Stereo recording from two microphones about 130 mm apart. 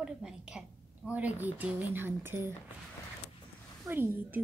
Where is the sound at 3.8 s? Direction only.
15° right (ahead or behind).